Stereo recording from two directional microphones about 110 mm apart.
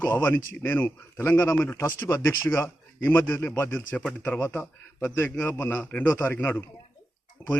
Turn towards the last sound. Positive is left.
turn(degrees=10)  # may be behind; listen again after turning